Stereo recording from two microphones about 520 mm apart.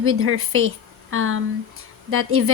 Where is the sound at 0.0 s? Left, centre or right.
Right.